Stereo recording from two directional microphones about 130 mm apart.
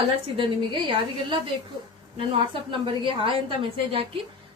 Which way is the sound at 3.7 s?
45° right (ahead or behind).